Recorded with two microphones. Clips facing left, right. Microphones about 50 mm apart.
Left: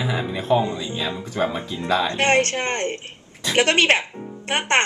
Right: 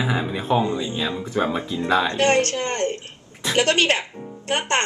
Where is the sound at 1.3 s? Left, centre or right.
Centre.